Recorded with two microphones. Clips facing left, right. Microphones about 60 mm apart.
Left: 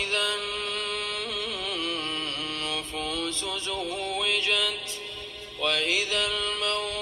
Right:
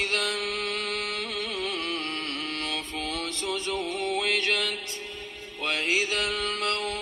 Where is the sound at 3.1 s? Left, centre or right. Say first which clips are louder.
Right 2 dB; right.